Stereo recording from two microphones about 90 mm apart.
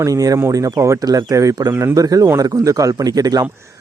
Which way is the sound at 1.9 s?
40° right (ahead or behind).